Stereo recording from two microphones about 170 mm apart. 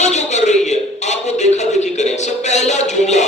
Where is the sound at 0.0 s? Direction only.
40° left (ahead or behind).